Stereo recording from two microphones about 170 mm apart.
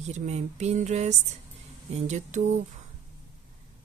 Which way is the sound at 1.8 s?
40° right (ahead or behind).